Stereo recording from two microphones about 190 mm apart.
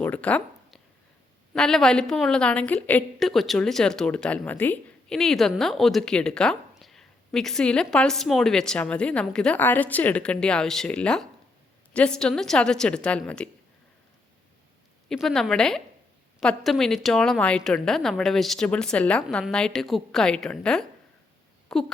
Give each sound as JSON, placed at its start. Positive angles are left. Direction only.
{"t": 0.0, "sound": "a sound", "side_deg": 5}
{"t": 1.5, "sound": "a woman's voice", "side_deg": 5}
{"t": 15.1, "sound": "a woman's voice", "side_deg": 0}